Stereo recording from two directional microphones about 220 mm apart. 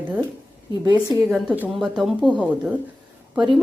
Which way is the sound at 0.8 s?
20° right (ahead or behind).